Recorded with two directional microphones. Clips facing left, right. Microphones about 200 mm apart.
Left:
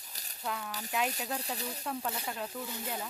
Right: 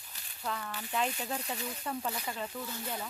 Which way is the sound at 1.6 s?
35° left (ahead or behind).